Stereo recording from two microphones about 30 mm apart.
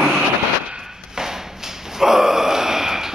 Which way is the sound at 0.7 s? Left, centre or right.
Centre.